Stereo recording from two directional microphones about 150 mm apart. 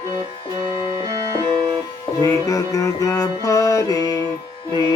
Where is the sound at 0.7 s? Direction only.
25° right (ahead or behind).